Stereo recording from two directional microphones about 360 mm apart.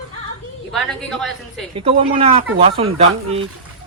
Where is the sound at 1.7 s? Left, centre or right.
Centre.